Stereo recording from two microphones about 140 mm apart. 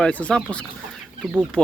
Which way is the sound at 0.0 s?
10° left (ahead or behind).